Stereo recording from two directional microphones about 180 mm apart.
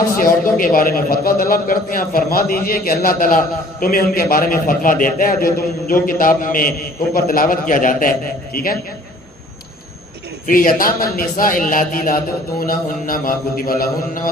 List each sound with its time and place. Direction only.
0.2 s a man's voice: 50° left (ahead or behind)
10.4 s a man's voice: 50° left (ahead or behind)